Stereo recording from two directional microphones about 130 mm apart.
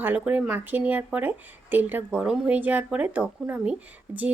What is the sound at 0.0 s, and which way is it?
Speech, 10° right (ahead or behind).